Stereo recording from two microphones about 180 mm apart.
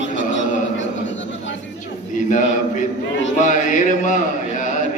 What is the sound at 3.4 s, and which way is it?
Mantra, 45° left (ahead or behind).